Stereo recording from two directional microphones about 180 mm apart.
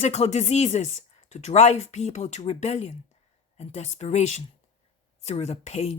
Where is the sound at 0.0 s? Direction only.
40° left (ahead or behind).